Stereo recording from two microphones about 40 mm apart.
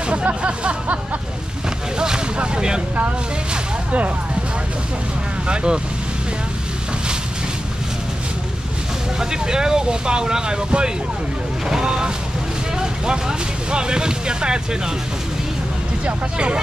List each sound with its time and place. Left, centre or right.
0.1 s speech: right
2.0 s vehicle: right
5.5 s speech: right
9.2 s speech: centre
12.7 s vehicle: right
13.7 s speech: right
16.1 s speech: right